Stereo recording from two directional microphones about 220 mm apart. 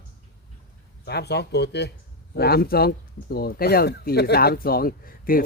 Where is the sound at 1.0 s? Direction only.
50° left (ahead or behind).